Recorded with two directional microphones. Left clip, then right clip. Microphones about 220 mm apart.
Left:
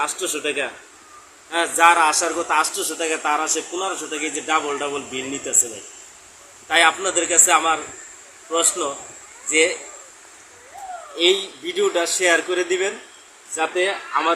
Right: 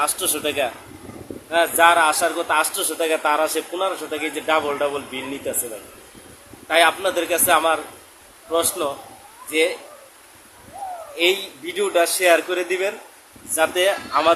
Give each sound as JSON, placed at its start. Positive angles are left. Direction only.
{"t": 0.0, "sound": "a man's voice", "side_deg": -35}
{"t": 1.5, "sound": "a man's voice", "side_deg": -10}
{"t": 6.7, "sound": "a man's voice", "side_deg": -15}
{"t": 9.5, "sound": "a man's voice", "side_deg": -15}
{"t": 11.2, "sound": "a man's voice", "side_deg": -20}
{"t": 13.6, "sound": "speech", "side_deg": -25}